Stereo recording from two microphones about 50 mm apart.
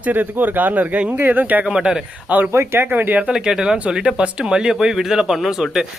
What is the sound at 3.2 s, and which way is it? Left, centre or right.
A man's voice, centre.